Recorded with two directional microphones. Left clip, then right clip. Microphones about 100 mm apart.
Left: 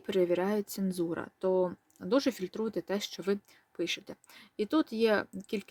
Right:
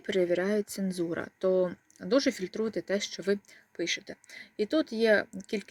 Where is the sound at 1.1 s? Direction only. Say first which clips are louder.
Right 4 dB; 25° left (ahead or behind).